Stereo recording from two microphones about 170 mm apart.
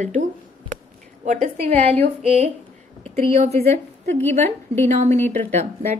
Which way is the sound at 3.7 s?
15° left (ahead or behind).